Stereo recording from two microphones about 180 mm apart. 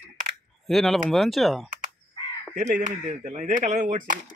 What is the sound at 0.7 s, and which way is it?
Speech, centre (ahead or behind).